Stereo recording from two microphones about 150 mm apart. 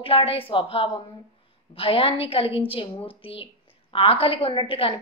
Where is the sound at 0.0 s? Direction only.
40° left (ahead or behind).